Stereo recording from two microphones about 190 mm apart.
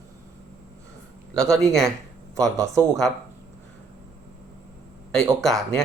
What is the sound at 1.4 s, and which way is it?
Speech, centre (ahead or behind).